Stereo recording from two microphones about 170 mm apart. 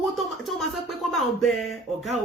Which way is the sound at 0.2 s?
Centre (ahead or behind).